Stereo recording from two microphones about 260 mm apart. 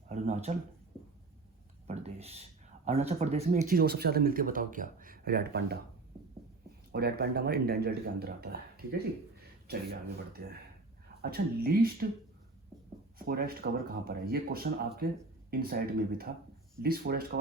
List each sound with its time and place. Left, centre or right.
0.1 s speech: right
1.9 s speech: right
6.9 s speech: right
13.1 s speech: right